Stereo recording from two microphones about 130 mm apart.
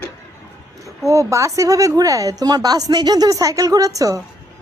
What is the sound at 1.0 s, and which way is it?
A woman's voice, 25° right (ahead or behind).